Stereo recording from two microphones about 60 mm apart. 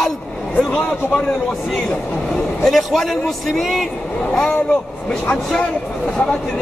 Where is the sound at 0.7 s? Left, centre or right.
Left.